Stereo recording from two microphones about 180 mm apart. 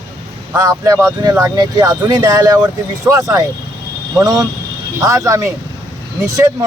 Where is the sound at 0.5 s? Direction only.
20° right (ahead or behind).